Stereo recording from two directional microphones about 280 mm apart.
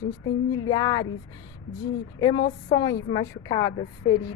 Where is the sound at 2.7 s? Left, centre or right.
Centre.